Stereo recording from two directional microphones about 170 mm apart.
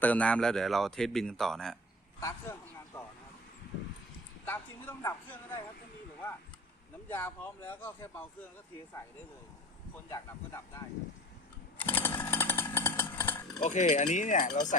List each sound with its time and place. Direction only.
0.0 s speech: 10° left (ahead or behind)
2.2 s speech: 15° left (ahead or behind)
4.4 s speech: 10° left (ahead or behind)
7.1 s speech: 10° left (ahead or behind)
10.1 s speech: 20° left (ahead or behind)
11.8 s chainsaw: 10° left (ahead or behind)
13.6 s speech: 45° left (ahead or behind)